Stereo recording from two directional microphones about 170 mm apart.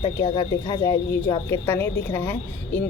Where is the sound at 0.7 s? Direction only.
30° left (ahead or behind).